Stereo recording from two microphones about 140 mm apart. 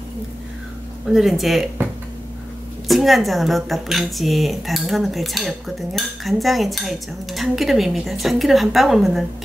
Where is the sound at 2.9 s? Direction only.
Centre (ahead or behind).